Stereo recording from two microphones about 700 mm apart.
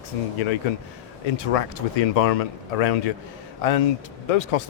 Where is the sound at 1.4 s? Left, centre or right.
Left.